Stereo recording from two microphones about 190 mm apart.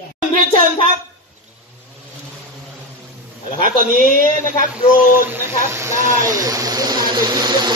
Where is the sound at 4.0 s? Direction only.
50° right (ahead or behind).